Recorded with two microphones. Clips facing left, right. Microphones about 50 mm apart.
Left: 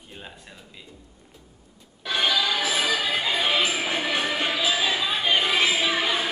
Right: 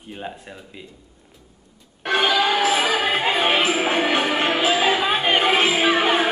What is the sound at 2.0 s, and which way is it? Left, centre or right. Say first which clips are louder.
Music: right 5 dB; right.